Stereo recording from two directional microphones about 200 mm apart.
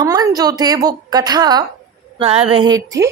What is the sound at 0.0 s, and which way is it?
A woman's voice, 20° right (ahead or behind).